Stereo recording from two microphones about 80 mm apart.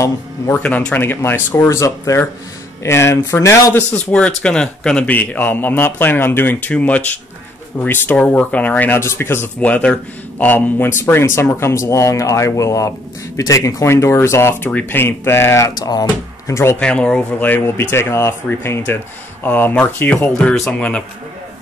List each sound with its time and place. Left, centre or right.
0.5 s a man's voice: centre; by 3.8 s left
3.9 s a man's voice: centre
9.0 s speech: left
9.6 s speech: centre; by 14.7 s left
14.7 s a man's voice: left
15.7 s speech: left
16.8 s speech: centre
17.7 s a man's voice: left